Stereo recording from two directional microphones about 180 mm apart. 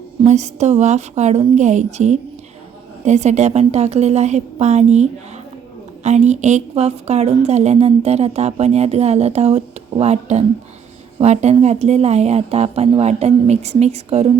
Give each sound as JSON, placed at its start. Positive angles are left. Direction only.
{"t": 0.3, "sound": "a woman's voice", "side_deg": -40}